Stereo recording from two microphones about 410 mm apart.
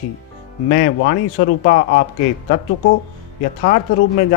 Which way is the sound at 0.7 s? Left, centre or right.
Left.